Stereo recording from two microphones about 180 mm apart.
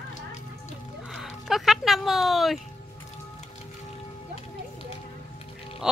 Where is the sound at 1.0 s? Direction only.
Centre (ahead or behind).